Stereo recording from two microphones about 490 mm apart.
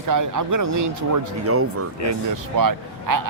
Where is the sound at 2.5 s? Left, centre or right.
Right.